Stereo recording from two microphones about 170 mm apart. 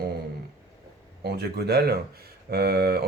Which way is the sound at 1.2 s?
75° right (ahead or behind).